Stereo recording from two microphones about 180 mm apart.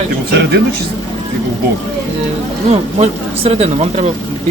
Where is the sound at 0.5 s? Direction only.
60° right (ahead or behind).